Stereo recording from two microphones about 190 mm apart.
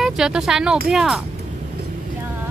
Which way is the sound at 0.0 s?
Centre (ahead or behind).